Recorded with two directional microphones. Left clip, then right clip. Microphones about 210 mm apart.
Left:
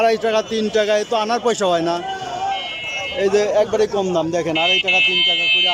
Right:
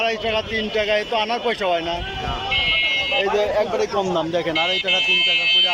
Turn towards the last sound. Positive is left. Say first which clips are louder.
# left 1 dB
turn(degrees=-25)  # may be behind; listen again after turning